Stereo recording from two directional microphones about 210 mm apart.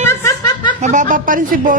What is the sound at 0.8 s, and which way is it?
Speech, 35° right (ahead or behind).